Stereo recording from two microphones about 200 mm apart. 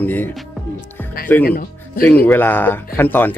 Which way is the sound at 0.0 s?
10° left (ahead or behind).